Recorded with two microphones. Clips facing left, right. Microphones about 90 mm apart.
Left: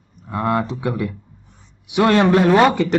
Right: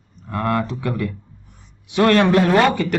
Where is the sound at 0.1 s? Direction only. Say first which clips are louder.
Left 1 dB; 15° left (ahead or behind).